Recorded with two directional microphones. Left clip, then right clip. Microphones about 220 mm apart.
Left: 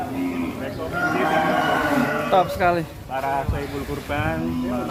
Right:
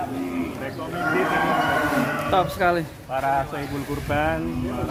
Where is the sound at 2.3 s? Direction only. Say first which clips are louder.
Left 2 dB; centre (ahead or behind).